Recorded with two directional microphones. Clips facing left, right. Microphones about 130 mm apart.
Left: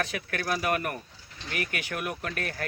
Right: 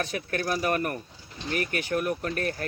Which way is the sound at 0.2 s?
35° right (ahead or behind).